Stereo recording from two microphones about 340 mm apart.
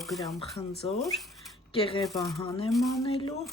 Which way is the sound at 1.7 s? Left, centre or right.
Centre.